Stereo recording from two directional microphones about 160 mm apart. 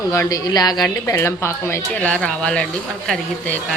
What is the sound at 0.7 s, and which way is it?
Speech, 5° left (ahead or behind).